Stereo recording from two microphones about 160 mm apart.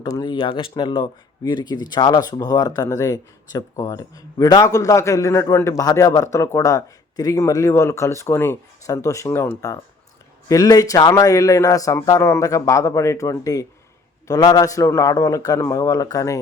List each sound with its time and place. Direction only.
0.0 s speech: 25° left (ahead or behind)